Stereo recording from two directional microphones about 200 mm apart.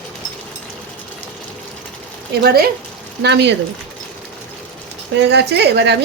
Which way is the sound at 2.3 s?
50° right (ahead or behind).